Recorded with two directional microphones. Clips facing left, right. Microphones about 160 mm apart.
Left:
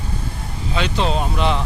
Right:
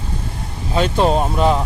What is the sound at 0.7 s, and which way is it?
Speech, 45° right (ahead or behind).